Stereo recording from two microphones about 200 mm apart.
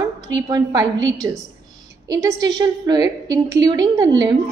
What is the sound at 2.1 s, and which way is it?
A woman's voice, 20° right (ahead or behind).